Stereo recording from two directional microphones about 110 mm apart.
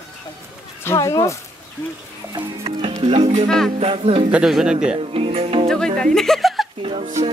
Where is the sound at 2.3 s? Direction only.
55° right (ahead or behind).